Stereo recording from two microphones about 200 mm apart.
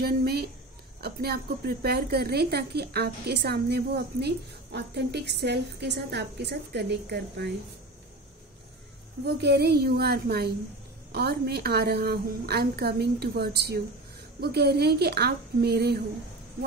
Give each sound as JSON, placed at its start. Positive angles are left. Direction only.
{"t": 0.0, "sound": "a sound", "side_deg": -50}
{"t": 1.0, "sound": "a woman's voice", "side_deg": -50}
{"t": 9.2, "sound": "a woman's voice", "side_deg": -55}